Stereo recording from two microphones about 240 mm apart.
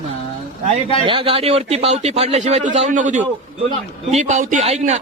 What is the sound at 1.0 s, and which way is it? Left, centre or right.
A man's voice, right.